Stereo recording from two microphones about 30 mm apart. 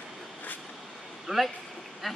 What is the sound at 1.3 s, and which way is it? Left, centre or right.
Speech, right.